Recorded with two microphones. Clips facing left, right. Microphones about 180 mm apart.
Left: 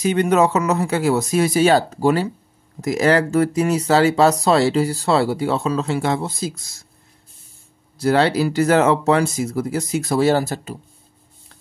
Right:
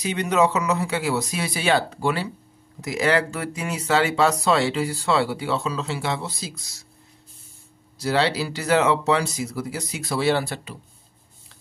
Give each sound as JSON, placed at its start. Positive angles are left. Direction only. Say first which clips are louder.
{"t": 0.0, "sound": "speech", "louder": "left 5 dB", "side_deg": 50}
{"t": 8.0, "sound": "speech", "louder": "left 6 dB", "side_deg": 50}